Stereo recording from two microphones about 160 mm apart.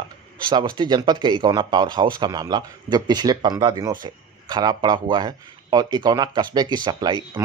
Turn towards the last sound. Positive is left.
turn(degrees=-30)  # may be behind; listen again after turning